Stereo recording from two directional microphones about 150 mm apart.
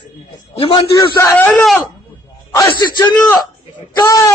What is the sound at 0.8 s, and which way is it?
Speech, 20° left (ahead or behind).